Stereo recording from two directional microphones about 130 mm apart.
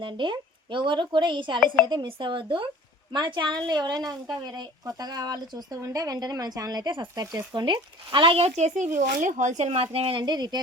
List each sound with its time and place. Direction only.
0.0 s speech: 40° right (ahead or behind)